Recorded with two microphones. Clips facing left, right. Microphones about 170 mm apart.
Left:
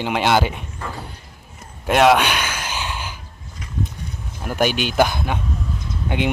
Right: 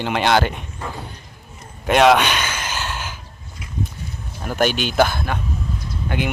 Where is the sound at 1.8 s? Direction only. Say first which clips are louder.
Right 1 dB; 5° left (ahead or behind).